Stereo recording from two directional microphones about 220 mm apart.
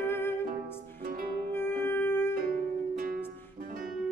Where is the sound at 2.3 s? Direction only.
40° right (ahead or behind).